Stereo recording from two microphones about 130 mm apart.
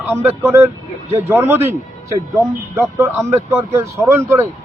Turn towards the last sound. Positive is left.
turn(degrees=-20)  # may be behind; listen again after turning